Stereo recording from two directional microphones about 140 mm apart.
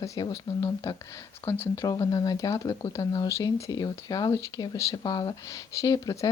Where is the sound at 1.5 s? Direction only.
15° left (ahead or behind).